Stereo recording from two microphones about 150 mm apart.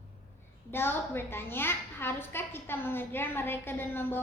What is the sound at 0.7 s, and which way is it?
A woman's voice, 15° left (ahead or behind).